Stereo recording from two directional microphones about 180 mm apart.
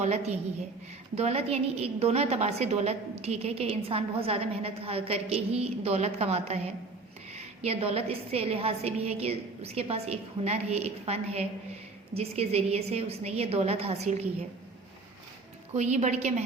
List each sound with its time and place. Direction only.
0.0 s a woman's voice: 35° right (ahead or behind)
15.7 s a woman's voice: 40° right (ahead or behind)